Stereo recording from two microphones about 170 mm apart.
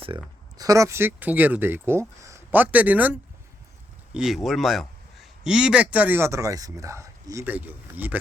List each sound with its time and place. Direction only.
0.0 s a man's voice: 25° right (ahead or behind); by 8.2 s 10° right (ahead or behind)